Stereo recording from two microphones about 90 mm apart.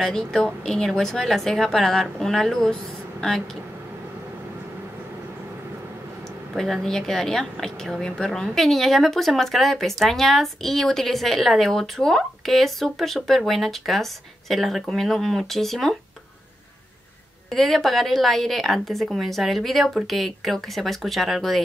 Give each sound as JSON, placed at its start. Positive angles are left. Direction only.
{"t": 0.0, "sound": "speech", "side_deg": 5}
{"t": 6.5, "sound": "speech", "side_deg": 0}
{"t": 17.5, "sound": "speech", "side_deg": 0}